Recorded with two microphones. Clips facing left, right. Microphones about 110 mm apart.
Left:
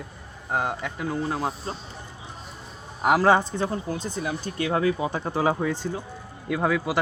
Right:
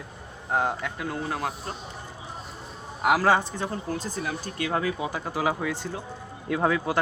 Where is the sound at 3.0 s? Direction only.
30° left (ahead or behind).